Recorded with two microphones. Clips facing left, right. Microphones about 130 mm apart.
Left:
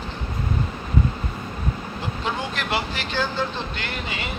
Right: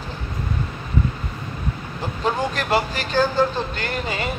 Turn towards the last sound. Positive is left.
turn(degrees=-40)  # may be behind; listen again after turning